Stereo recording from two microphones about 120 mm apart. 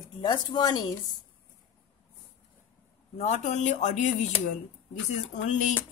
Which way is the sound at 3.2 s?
70° left (ahead or behind).